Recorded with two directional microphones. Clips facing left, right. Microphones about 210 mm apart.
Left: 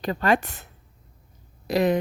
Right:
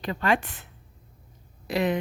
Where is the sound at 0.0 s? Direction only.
40° left (ahead or behind).